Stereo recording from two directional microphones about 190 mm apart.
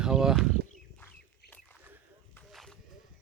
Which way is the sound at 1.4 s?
60° left (ahead or behind).